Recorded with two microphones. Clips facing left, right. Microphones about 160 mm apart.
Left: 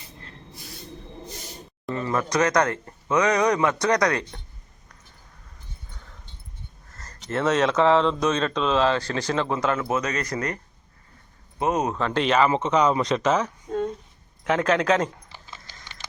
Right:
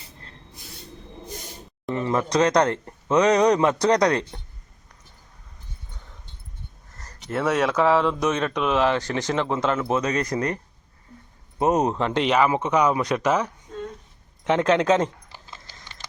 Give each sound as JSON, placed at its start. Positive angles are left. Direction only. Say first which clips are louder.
{"t": 1.9, "sound": "a man's voice", "louder": "right 2 dB", "side_deg": -20}
{"t": 6.9, "sound": "speech", "louder": "even", "side_deg": -15}
{"t": 9.9, "sound": "speech", "louder": "right 3 dB", "side_deg": -5}
{"t": 11.6, "sound": "speech", "louder": "right 3 dB", "side_deg": -40}
{"t": 11.9, "sound": "a man's voice", "louder": "right 1 dB", "side_deg": -20}
{"t": 15.3, "sound": "a sound", "louder": "even", "side_deg": -5}